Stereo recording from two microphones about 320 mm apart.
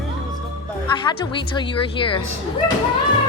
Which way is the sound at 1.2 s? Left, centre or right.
Centre.